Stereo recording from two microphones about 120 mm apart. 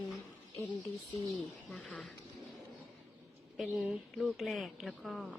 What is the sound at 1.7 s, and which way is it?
Speech, 5° left (ahead or behind).